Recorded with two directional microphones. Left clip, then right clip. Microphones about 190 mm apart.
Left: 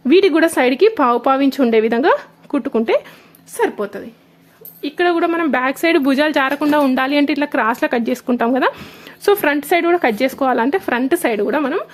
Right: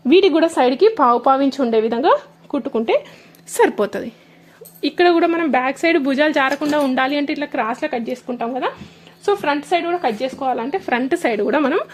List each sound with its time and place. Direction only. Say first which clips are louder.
0.1 s speech: left 1 dB; 10° left (ahead or behind)
3.6 s a woman's voice: right 3 dB; 30° right (ahead or behind)
5.2 s speech: even; centre (ahead or behind)